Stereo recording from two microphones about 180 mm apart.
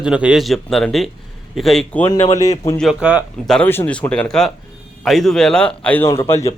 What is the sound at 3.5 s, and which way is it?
A man's voice, 10° left (ahead or behind).